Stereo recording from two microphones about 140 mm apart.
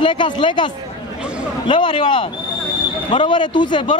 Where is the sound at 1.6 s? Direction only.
35° left (ahead or behind).